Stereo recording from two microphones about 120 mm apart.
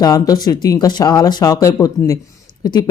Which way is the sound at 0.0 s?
30° left (ahead or behind).